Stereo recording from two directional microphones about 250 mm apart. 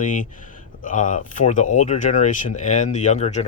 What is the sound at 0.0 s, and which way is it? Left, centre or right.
Speech, left.